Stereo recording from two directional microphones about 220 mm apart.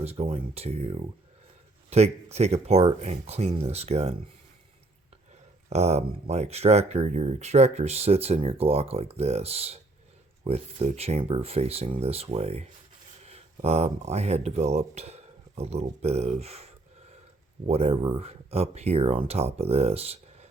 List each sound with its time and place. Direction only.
0.0 s speech: 25° right (ahead or behind)
5.6 s speech: 30° right (ahead or behind)